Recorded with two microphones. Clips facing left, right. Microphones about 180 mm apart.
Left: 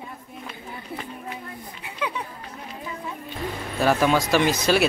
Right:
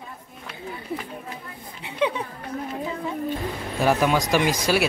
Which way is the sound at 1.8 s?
25° right (ahead or behind).